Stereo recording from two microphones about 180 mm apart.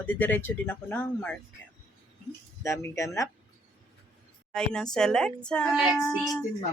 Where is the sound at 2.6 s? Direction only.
15° left (ahead or behind).